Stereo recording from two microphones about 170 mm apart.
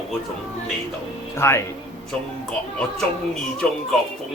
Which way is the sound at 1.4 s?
15° left (ahead or behind).